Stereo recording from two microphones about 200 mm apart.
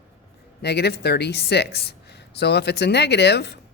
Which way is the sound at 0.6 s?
55° left (ahead or behind).